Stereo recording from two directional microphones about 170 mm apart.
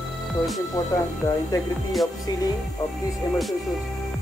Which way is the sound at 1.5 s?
20° left (ahead or behind).